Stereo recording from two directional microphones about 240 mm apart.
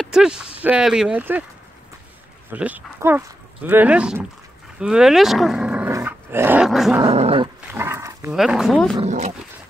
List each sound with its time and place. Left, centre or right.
0.0 s speech: centre
2.5 s speech: centre
7.0 s dog: right
7.7 s dog: centre
8.4 s speech: centre
8.9 s dog: right